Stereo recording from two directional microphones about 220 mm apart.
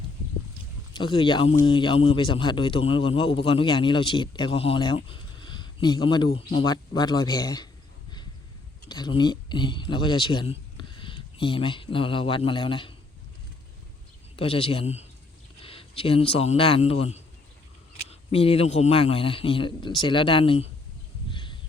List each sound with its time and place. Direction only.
0.9 s speech: 20° left (ahead or behind)
8.9 s speech: 20° left (ahead or behind)
14.3 s a man's voice: 25° left (ahead or behind)
21.2 s a sound: 20° left (ahead or behind)